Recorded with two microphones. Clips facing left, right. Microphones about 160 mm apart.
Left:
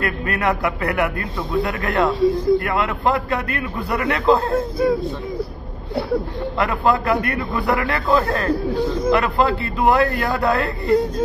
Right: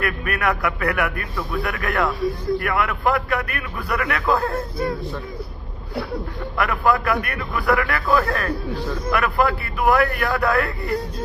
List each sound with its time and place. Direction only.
0.0 s a man's voice: 25° left (ahead or behind)
6.6 s a man's voice: 25° left (ahead or behind)